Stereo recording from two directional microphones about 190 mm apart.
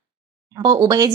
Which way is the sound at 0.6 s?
20° right (ahead or behind).